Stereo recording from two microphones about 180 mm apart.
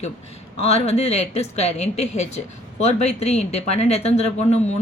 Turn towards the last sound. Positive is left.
turn(degrees=40)  # may be behind; listen again after turning